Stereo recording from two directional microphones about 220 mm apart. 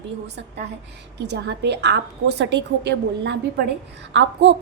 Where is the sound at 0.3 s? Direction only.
50° right (ahead or behind).